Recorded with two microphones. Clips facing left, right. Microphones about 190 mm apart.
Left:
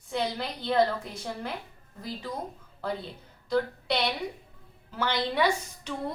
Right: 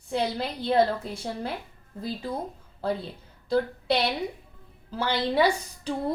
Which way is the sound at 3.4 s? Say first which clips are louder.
Right 3 dB; 30° right (ahead or behind).